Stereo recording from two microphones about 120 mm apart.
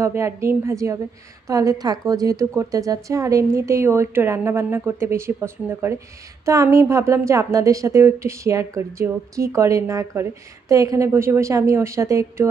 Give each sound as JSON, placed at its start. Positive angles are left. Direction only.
{"t": 0.0, "sound": "a woman's voice", "side_deg": -25}